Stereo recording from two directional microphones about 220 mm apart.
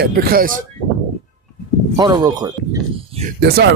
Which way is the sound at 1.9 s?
20° right (ahead or behind).